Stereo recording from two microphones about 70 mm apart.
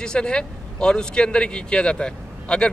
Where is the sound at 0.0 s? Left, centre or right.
Centre.